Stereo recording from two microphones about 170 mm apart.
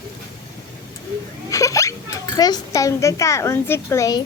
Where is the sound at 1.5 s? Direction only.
20° left (ahead or behind).